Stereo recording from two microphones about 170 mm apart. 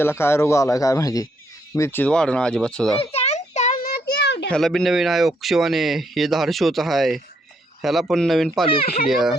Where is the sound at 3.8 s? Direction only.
65° left (ahead or behind); by 4.4 s 85° left.